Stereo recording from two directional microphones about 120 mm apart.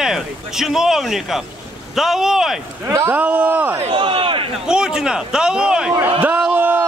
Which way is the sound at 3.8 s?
50° right (ahead or behind).